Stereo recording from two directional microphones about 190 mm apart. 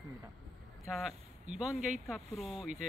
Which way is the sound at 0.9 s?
Centre (ahead or behind).